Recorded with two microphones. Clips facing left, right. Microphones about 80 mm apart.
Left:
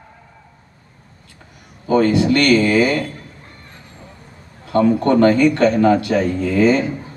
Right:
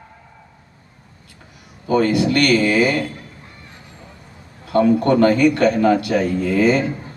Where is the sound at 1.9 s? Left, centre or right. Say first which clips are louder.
Left 2 dB; left.